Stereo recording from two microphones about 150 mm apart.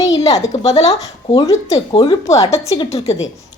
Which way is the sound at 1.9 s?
35° left (ahead or behind).